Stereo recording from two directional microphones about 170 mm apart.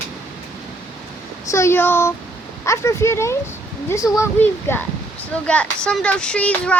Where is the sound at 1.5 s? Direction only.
15° left (ahead or behind).